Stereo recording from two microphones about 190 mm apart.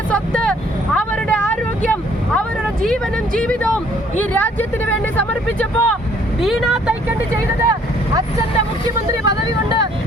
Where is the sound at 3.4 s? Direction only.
5° left (ahead or behind).